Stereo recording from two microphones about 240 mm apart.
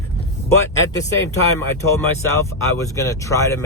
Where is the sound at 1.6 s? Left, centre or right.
Centre.